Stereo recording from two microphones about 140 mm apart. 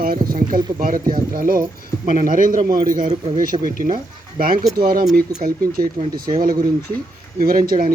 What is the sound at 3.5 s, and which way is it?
Speech, 50° right (ahead or behind).